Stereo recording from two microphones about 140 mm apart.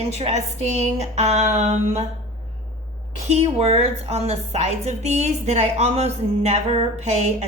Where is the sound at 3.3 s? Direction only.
50° right (ahead or behind).